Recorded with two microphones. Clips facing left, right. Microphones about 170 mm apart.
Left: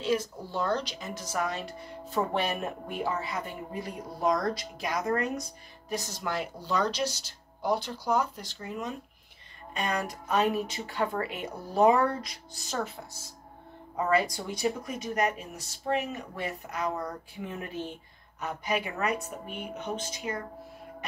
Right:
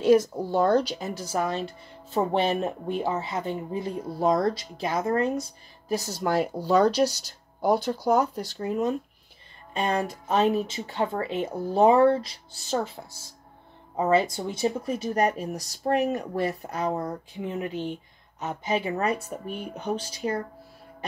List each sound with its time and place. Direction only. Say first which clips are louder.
0.0 s speech: right 10 dB; 50° right (ahead or behind)
0.8 s speech: right 6 dB; 35° right (ahead or behind)
9.8 s speech: right 5 dB; 25° right (ahead or behind)